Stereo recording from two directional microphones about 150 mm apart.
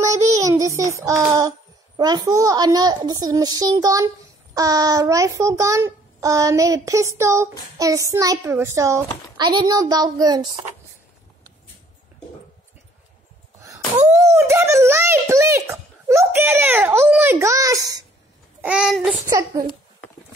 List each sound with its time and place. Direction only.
0.0 s child singing: 20° right (ahead or behind)
2.0 s a child's voice: 25° right (ahead or behind)
13.6 s a child's voice: 15° right (ahead or behind)
18.6 s babbling: 5° right (ahead or behind)
19.2 s a child's voice: 25° right (ahead or behind)